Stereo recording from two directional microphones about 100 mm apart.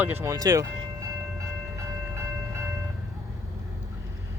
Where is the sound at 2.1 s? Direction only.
25° right (ahead or behind).